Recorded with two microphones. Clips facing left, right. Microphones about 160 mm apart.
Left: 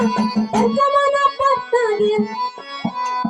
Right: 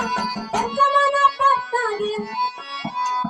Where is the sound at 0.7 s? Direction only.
35° left (ahead or behind).